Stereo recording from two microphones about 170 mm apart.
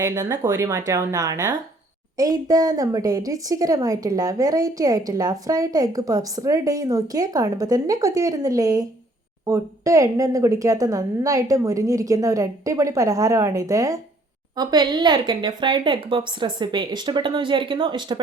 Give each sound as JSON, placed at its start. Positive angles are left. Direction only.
{"t": 0.0, "sound": "a woman's voice", "side_deg": -15}